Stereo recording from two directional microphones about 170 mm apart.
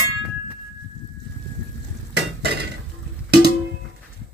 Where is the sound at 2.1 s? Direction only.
75° right (ahead or behind).